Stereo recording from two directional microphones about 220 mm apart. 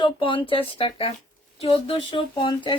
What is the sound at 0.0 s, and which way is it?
A woman's voice, 20° left (ahead or behind).